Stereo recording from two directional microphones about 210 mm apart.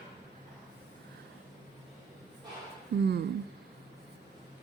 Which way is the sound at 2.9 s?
55° right (ahead or behind).